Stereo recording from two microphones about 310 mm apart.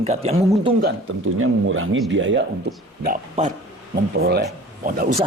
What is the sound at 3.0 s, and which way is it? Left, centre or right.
Speech, right.